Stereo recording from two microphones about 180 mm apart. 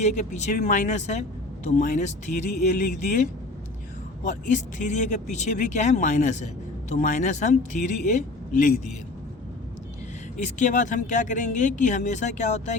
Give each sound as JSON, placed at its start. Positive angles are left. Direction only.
{"t": 0.0, "sound": "speech", "side_deg": 40}
{"t": 4.2, "sound": "speech", "side_deg": 45}
{"t": 10.3, "sound": "speech", "side_deg": 45}